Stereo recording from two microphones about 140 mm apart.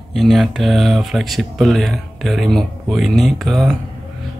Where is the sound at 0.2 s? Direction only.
Centre (ahead or behind).